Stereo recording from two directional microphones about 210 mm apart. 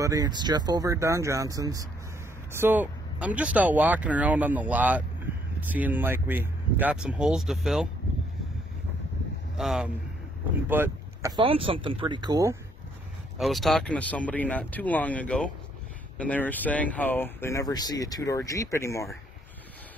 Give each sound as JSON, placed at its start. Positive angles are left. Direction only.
{"t": 0.0, "sound": "speech", "side_deg": -15}
{"t": 9.6, "sound": "speech", "side_deg": 0}
{"t": 11.3, "sound": "speech", "side_deg": -25}
{"t": 13.4, "sound": "speech", "side_deg": 0}